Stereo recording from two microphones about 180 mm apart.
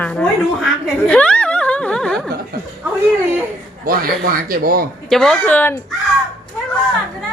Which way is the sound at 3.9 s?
55° right (ahead or behind).